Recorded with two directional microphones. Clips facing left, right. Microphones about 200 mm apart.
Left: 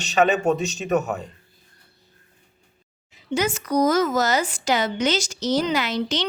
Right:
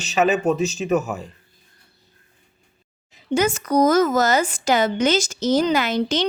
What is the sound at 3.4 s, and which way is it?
A woman's voice, 45° right (ahead or behind).